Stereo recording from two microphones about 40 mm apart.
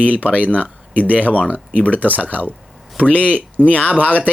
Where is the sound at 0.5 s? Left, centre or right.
Left.